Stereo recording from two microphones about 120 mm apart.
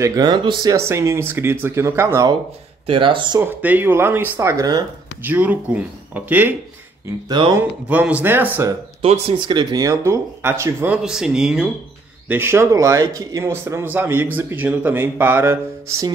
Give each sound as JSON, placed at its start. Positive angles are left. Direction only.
{"t": 0.0, "sound": "speech", "side_deg": -30}
{"t": 2.9, "sound": "speech", "side_deg": -45}
{"t": 3.3, "sound": "speech", "side_deg": -15}
{"t": 5.2, "sound": "speech", "side_deg": -15}
{"t": 7.2, "sound": "speech", "side_deg": -40}
{"t": 7.9, "sound": "speech", "side_deg": -15}
{"t": 9.3, "sound": "speech", "side_deg": -40}
{"t": 11.0, "sound": "speech", "side_deg": -5}
{"t": 12.3, "sound": "speech", "side_deg": -20}